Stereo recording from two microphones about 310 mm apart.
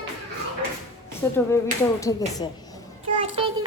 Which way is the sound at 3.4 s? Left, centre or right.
Centre.